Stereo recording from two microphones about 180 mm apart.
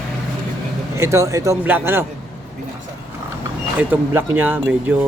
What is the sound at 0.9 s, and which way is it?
Speech, 15° right (ahead or behind).